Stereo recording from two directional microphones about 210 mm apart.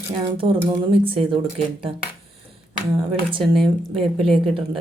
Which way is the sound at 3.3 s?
25° right (ahead or behind).